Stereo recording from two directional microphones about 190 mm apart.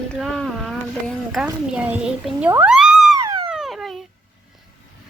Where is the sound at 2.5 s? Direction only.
5° right (ahead or behind).